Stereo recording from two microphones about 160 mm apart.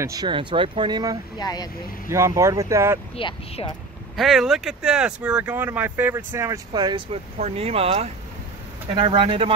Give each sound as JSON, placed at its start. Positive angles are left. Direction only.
{"t": 0.0, "sound": "speech", "side_deg": -25}
{"t": 1.4, "sound": "speech", "side_deg": 25}
{"t": 2.0, "sound": "speech", "side_deg": -20}
{"t": 3.2, "sound": "speech", "side_deg": 30}
{"t": 4.2, "sound": "speech", "side_deg": 0}
{"t": 6.7, "sound": "speech", "side_deg": -30}
{"t": 7.3, "sound": "speech", "side_deg": -40}